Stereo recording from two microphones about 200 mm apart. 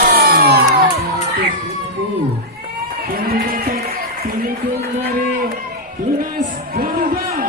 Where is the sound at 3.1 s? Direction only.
45° right (ahead or behind).